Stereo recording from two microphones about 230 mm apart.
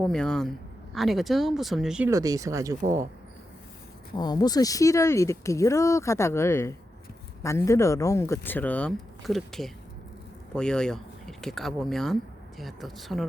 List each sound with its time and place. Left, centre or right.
0.1 s speech: centre
2.8 s speech: right
4.2 s speech: centre